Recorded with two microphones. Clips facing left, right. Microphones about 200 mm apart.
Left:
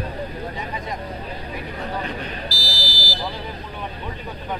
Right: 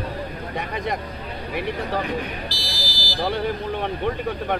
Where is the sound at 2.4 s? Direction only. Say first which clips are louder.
Left 1 dB; 20° right (ahead or behind).